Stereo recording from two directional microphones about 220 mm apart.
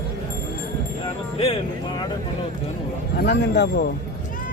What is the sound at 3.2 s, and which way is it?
Speech, 45° left (ahead or behind).